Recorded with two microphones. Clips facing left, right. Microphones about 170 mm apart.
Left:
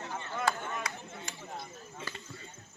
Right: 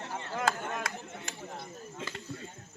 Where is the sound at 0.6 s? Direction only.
55° right (ahead or behind).